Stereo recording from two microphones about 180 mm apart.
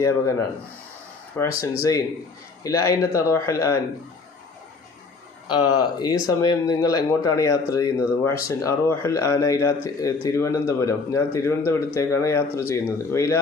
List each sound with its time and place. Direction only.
0.0 s speech: 15° left (ahead or behind)
2.6 s speech: 15° left (ahead or behind)
5.5 s speech: 20° left (ahead or behind)